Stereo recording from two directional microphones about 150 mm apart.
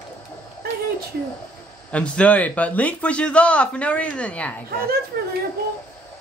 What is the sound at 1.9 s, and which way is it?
A woman's voice, 10° left (ahead or behind).